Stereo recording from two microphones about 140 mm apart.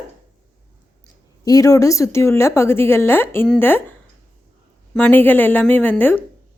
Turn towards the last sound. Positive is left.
turn(degrees=10)  # may be behind; listen again after turning